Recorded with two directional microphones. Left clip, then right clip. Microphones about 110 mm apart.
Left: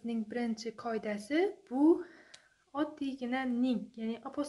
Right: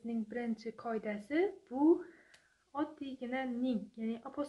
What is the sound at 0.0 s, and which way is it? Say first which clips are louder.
A woman's voice: left 3 dB; 35° left (ahead or behind).